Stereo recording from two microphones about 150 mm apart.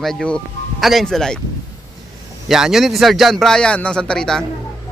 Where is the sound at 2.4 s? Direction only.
5° right (ahead or behind).